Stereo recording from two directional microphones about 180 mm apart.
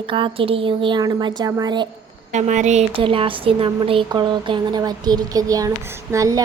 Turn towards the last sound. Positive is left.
turn(degrees=-15)  # may be behind; listen again after turning